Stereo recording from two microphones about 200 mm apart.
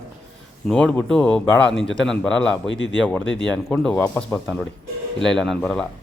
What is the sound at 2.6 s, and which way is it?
Speech, 65° left (ahead or behind).